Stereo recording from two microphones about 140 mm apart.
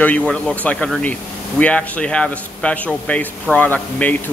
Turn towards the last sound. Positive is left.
turn(degrees=10)  # may be behind; listen again after turning